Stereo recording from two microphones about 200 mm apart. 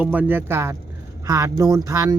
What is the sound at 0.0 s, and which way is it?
Speech, 5° right (ahead or behind).